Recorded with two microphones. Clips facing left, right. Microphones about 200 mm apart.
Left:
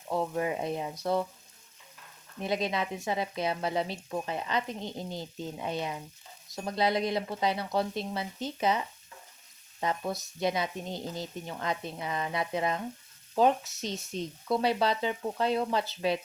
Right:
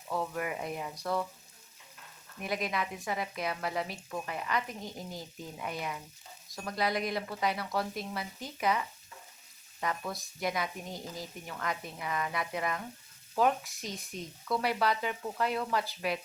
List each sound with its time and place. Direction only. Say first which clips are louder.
0.1 s frying: left 4 dB; 25° left (ahead or behind)
2.4 s frying: left 4 dB; 25° left (ahead or behind)